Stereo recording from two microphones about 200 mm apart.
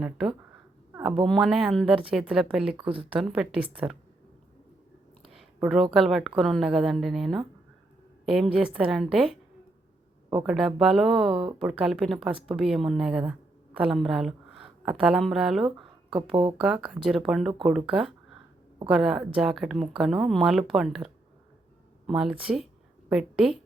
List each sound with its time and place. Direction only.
0.0 s a woman's voice: 5° right (ahead or behind)
2.8 s speech: 25° right (ahead or behind)
3.2 s a woman's voice: 5° right (ahead or behind)
5.6 s a woman's voice: centre (ahead or behind)
10.4 s a woman's voice: centre (ahead or behind)
16.0 s speech: 25° right (ahead or behind)
16.6 s a woman's voice: 5° right (ahead or behind)